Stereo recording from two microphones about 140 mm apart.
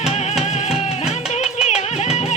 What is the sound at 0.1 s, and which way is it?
Music, 50° left (ahead or behind).